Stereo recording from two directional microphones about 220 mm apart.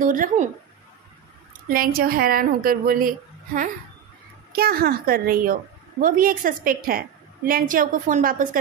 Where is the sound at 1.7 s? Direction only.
40° right (ahead or behind).